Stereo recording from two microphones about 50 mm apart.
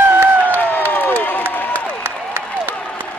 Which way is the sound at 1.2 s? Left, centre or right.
Left.